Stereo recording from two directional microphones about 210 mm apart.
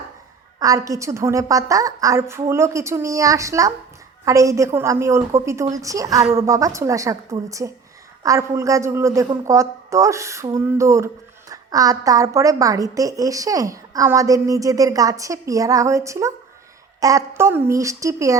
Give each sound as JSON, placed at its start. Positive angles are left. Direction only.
{"t": 0.6, "sound": "a woman's voice", "side_deg": -15}